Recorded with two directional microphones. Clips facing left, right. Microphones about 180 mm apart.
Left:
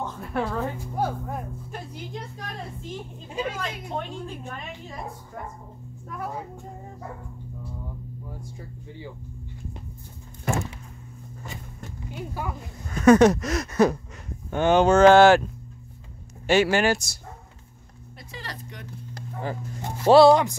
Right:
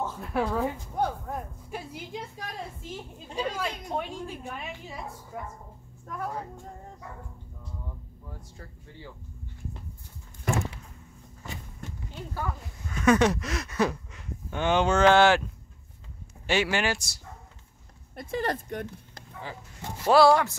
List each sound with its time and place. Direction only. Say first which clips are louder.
0.0 s a sound: even; 5° right (ahead or behind)
0.9 s speech: left 4 dB; 5° left (ahead or behind)
1.7 s a woman's voice: left 1 dB; 5° right (ahead or behind)
3.3 s speech: left 1 dB; 5° left (ahead or behind)
3.9 s a woman's voice: left 1 dB; 10° right (ahead or behind)
6.0 s speech: left 1 dB; 5° left (ahead or behind)
8.3 s speech: left 6 dB; 10° left (ahead or behind)
12.1 s speech: left 2 dB; 15° left (ahead or behind)
12.8 s speech: left 7 dB; 40° left (ahead or behind)
16.4 s speech: left 6 dB; 40° left (ahead or behind)
18.1 s speech: right 10 dB; 50° right (ahead or behind)
19.1 s a sound: left 12 dB; 45° left (ahead or behind)
20.1 s speech: left 5 dB; 20° left (ahead or behind)